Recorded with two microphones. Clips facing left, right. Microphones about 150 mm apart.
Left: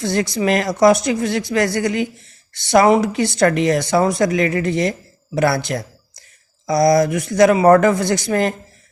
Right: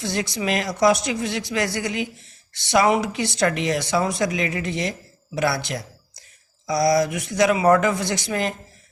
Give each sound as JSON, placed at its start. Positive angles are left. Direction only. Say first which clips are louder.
{"t": 0.0, "sound": "speech", "louder": "left 7 dB", "side_deg": 50}